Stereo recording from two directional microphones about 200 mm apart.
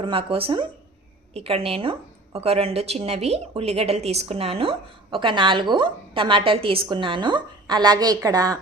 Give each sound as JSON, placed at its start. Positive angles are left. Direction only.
{"t": 0.0, "sound": "a woman's voice", "side_deg": -25}